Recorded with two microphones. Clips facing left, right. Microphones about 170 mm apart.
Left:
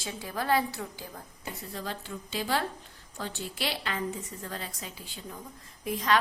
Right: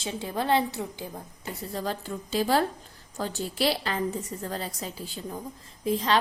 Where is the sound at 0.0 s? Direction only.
25° right (ahead or behind).